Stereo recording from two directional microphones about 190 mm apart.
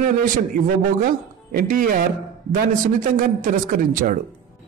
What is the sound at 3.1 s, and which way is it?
Speech, 45° right (ahead or behind).